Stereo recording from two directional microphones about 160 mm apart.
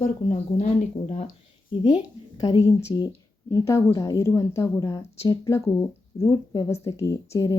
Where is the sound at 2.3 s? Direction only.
25° left (ahead or behind).